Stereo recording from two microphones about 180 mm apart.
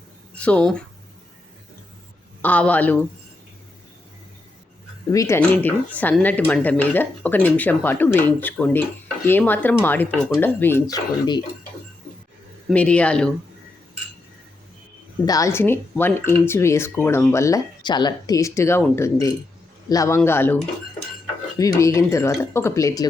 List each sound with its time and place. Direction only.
0.3 s speech: 5° left (ahead or behind)
2.4 s speech: 10° left (ahead or behind)
5.1 s speech: 15° left (ahead or behind)
12.7 s speech: 5° left (ahead or behind)
15.2 s speech: 20° left (ahead or behind)
21.6 s speech: 20° left (ahead or behind)